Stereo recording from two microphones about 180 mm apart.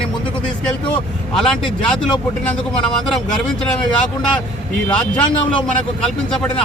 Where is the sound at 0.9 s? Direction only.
5° left (ahead or behind).